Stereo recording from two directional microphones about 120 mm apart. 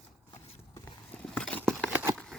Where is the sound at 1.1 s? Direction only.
10° left (ahead or behind).